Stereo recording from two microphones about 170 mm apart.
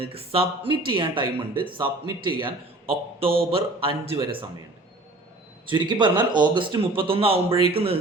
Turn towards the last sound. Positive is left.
turn(degrees=-35)  # may be behind; listen again after turning